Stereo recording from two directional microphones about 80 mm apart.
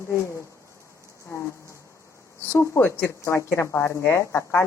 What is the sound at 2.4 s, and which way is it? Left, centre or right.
A woman's voice, left.